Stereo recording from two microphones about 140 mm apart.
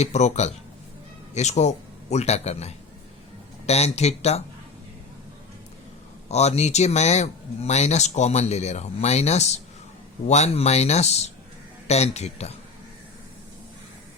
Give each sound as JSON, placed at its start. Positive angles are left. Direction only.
{"t": 0.0, "sound": "speech", "side_deg": 55}
{"t": 6.2, "sound": "speech", "side_deg": 50}